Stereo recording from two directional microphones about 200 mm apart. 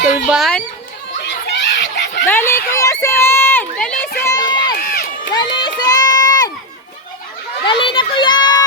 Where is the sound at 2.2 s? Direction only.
10° left (ahead or behind).